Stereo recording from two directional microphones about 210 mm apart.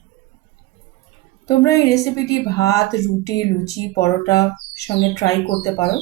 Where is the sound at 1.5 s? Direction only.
15° left (ahead or behind).